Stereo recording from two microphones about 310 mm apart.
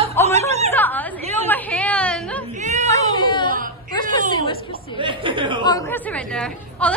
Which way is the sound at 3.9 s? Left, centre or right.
Centre.